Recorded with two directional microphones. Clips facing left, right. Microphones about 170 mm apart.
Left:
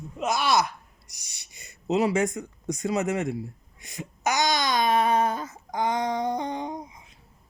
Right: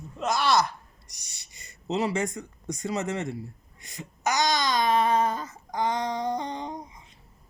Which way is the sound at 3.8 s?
15° left (ahead or behind).